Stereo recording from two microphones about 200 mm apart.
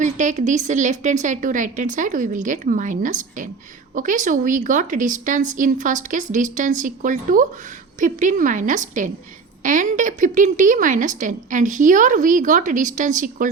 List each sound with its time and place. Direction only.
0.0 s a woman's voice: 40° right (ahead or behind)